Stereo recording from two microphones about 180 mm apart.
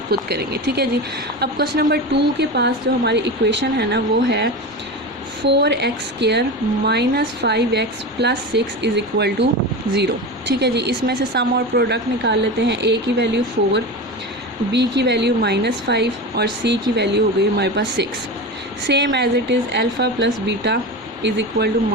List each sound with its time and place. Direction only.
0.1 s speech: 65° right (ahead or behind)
5.5 s speech: 70° right (ahead or behind)